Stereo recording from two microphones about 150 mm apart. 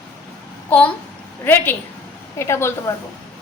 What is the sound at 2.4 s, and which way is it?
Speech, 15° left (ahead or behind).